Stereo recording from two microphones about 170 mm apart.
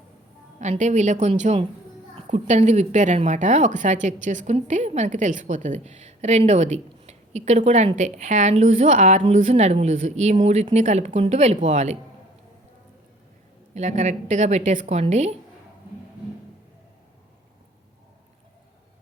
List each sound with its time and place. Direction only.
0.6 s speech: 45° right (ahead or behind)
13.7 s speech: 45° right (ahead or behind)